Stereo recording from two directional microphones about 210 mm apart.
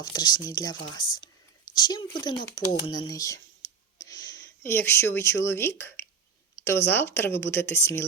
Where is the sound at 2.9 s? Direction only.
20° left (ahead or behind).